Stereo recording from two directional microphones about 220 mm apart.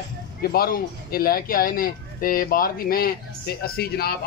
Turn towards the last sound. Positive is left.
turn(degrees=45)  # may be behind; listen again after turning